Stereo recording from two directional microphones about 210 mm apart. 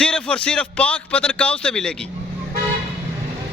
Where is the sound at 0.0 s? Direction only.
5° left (ahead or behind).